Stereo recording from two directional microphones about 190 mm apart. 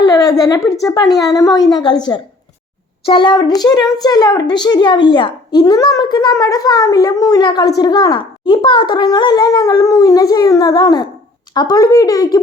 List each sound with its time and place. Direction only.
0.0 s a child's voice: 20° left (ahead or behind)